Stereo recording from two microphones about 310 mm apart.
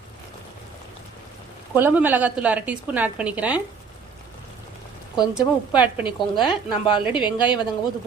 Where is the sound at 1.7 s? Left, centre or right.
Centre.